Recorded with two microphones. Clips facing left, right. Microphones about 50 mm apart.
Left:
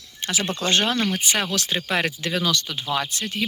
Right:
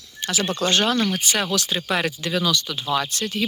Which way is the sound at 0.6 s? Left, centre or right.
Left.